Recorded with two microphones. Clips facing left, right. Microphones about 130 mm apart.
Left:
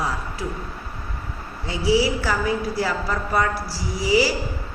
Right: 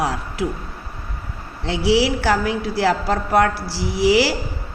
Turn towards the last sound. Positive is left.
turn(degrees=-75)  # may be behind; listen again after turning